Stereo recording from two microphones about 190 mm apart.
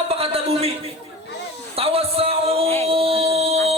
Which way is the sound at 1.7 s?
30° right (ahead or behind).